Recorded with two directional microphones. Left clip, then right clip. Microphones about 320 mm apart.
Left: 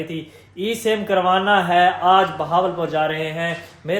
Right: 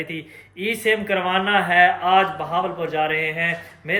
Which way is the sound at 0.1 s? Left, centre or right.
Centre.